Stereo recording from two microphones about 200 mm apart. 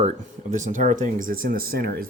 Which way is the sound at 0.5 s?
40° right (ahead or behind).